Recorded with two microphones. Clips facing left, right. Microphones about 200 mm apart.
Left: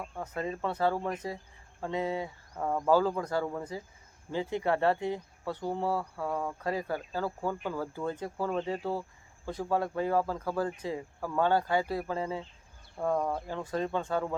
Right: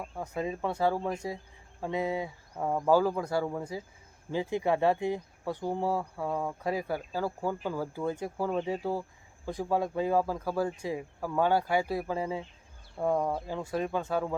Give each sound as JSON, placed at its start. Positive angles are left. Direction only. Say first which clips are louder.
{"t": 0.0, "sound": "speech", "louder": "right 1 dB", "side_deg": -10}